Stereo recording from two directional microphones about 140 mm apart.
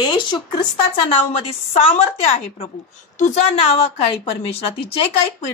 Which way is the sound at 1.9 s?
50° left (ahead or behind).